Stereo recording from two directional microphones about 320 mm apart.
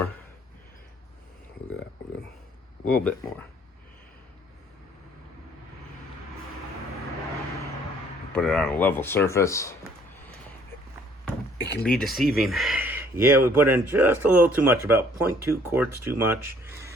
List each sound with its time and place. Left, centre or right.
2.9 s speech: centre
8.3 s speech: centre
11.5 s door: left
11.8 s speech: centre